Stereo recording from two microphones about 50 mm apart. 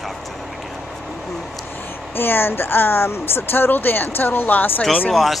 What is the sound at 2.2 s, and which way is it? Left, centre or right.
Speech, left.